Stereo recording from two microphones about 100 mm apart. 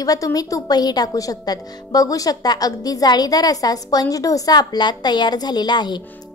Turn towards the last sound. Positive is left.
turn(degrees=45)  # may be behind; listen again after turning